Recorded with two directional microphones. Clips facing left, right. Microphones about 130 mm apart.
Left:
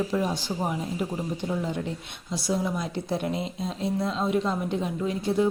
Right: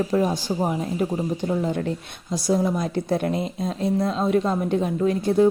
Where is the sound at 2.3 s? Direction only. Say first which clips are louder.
Right 6 dB; 45° right (ahead or behind).